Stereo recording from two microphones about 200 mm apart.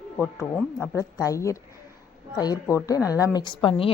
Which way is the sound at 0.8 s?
15° left (ahead or behind).